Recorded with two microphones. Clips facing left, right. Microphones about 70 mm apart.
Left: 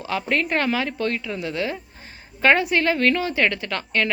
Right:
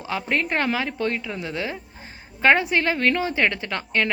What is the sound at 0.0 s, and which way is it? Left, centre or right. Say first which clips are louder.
A woman's voice: left 1 dB; right.